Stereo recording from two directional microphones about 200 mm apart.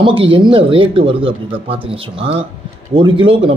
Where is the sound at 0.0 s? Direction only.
25° right (ahead or behind).